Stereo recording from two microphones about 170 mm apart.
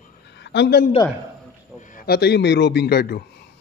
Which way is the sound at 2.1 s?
75° left (ahead or behind).